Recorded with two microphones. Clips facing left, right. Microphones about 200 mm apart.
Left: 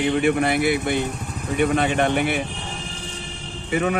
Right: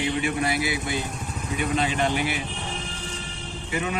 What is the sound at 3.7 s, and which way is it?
Speech, 55° left (ahead or behind).